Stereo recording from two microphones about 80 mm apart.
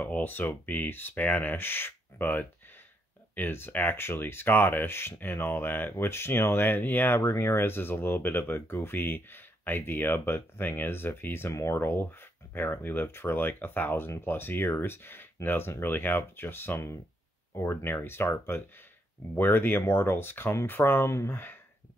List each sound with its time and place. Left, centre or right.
0.0 s speech: left